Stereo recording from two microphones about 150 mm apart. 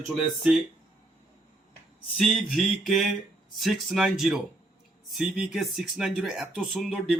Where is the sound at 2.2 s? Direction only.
Centre (ahead or behind).